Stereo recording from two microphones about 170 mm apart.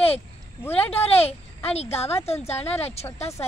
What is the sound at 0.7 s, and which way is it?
A woman's voice, 35° left (ahead or behind).